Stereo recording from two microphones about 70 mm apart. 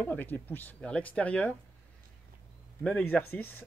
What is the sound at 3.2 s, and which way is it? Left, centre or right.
Speech, left.